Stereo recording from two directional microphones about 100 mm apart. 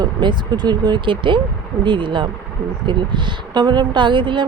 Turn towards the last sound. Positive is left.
turn(degrees=-55)  # may be behind; listen again after turning